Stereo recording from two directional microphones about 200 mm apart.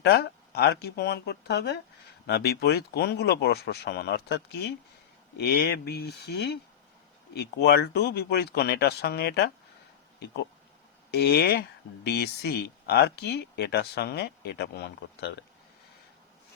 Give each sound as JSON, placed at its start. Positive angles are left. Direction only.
{"t": 0.0, "sound": "speech", "side_deg": 55}
{"t": 11.1, "sound": "speech", "side_deg": 55}